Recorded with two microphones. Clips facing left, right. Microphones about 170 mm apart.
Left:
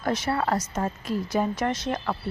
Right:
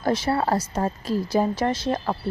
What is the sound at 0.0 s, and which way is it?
A woman's voice, 30° right (ahead or behind).